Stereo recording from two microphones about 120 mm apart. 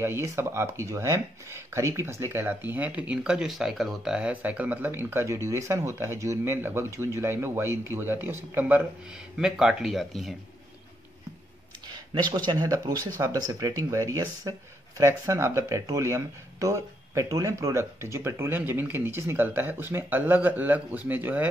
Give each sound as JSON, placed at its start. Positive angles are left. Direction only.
{"t": 0.0, "sound": "speech", "side_deg": -20}
{"t": 9.4, "sound": "speech", "side_deg": -5}
{"t": 11.9, "sound": "speech", "side_deg": -40}